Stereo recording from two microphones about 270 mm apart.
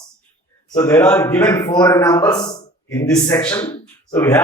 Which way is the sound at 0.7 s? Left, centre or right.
Centre.